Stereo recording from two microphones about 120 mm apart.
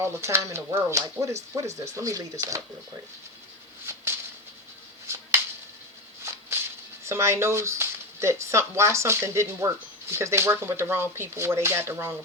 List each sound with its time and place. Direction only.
0.0 s speech: 20° right (ahead or behind)
5.0 s a sound: 20° right (ahead or behind)
7.0 s speech: 25° right (ahead or behind)